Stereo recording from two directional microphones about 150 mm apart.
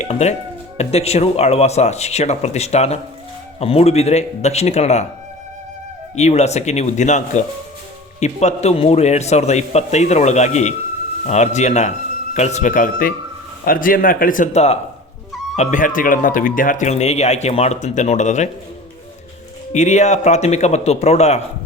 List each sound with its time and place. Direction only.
0.0 s speech: 45° left (ahead or behind)
6.1 s speech: 45° left (ahead or behind)
19.7 s speech: 50° left (ahead or behind)